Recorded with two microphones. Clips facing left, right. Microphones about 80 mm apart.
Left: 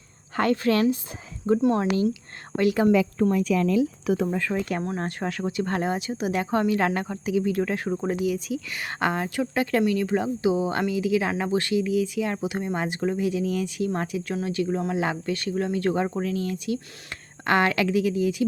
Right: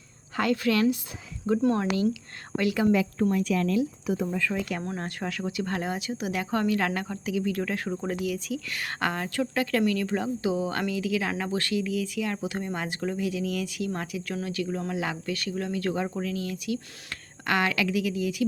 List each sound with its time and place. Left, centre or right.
0.3 s speech: left
4.1 s speech: left
4.4 s speech: left